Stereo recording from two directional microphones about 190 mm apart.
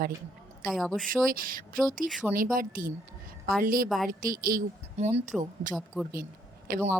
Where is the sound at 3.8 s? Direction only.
Centre (ahead or behind).